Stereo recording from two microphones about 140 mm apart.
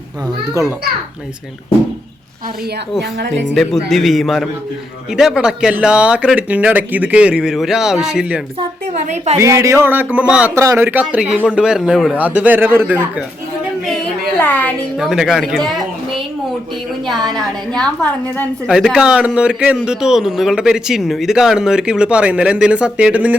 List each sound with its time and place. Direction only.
3.5 s a man's voice: centre (ahead or behind)
8.5 s a woman's voice: 50° right (ahead or behind)
9.4 s speech: 20° right (ahead or behind)
10.5 s a man's voice: 20° right (ahead or behind)
14.3 s a woman's voice: 15° left (ahead or behind)
14.9 s a woman's voice: 5° right (ahead or behind)
17.2 s a man's voice: 5° left (ahead or behind)
18.7 s a man's voice: 5° right (ahead or behind)